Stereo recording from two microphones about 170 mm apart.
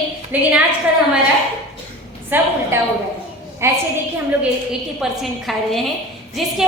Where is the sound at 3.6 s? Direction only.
15° right (ahead or behind).